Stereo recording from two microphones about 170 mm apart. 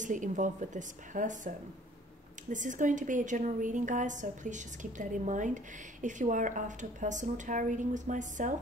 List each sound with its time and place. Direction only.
0.0 s a woman's voice: 50° right (ahead or behind)
2.5 s a woman's voice: 50° right (ahead or behind)